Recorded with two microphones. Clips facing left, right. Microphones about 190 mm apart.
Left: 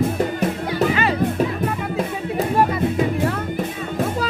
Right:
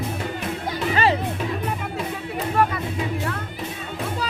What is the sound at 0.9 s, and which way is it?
Music, 30° right (ahead or behind).